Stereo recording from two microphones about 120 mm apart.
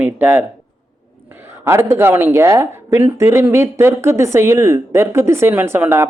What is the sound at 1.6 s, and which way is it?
A man's voice, 20° right (ahead or behind).